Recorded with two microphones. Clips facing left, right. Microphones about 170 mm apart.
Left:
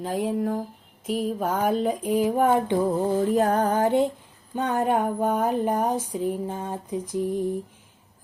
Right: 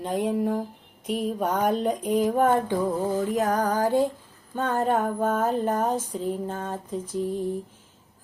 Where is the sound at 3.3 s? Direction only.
30° left (ahead or behind).